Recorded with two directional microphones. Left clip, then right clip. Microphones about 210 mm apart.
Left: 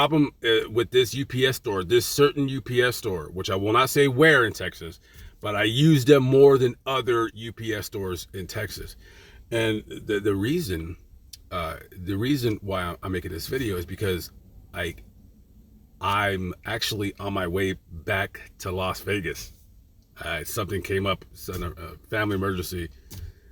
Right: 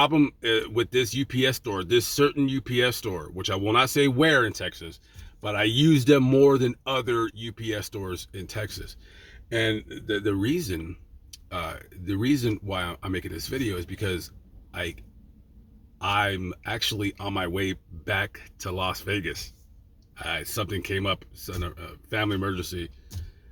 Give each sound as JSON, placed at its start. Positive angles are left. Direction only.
{"t": 0.0, "sound": "a man's voice", "side_deg": 15}
{"t": 16.0, "sound": "speech", "side_deg": 15}